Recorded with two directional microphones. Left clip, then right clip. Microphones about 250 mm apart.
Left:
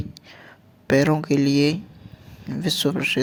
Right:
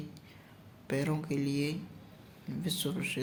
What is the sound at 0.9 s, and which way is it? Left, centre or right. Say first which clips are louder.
Speech: left 16 dB; left.